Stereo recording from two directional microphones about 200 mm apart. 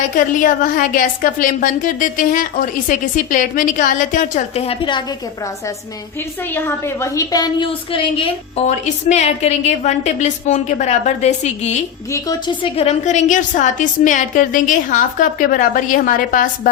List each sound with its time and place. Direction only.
0.3 s a woman's voice: 40° left (ahead or behind); by 5.0 s 25° left (ahead or behind)
6.4 s a woman's voice: 10° left (ahead or behind); by 11.9 s 35° left (ahead or behind)
12.1 s speech: 20° left (ahead or behind)
12.7 s a woman's voice: 35° left (ahead or behind)